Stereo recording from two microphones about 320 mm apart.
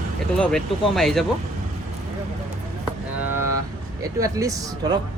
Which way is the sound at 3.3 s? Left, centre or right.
Centre.